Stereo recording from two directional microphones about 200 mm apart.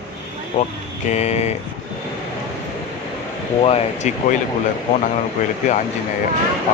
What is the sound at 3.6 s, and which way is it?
Speech, 30° left (ahead or behind).